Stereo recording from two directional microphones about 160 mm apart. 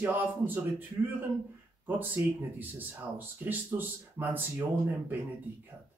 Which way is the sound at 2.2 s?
15° right (ahead or behind).